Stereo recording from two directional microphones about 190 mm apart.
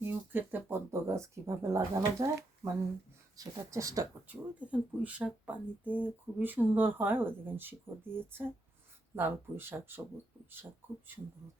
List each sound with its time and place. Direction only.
0.0 s speech: 10° right (ahead or behind)
3.3 s speech: 15° right (ahead or behind)
4.6 s speech: 5° right (ahead or behind)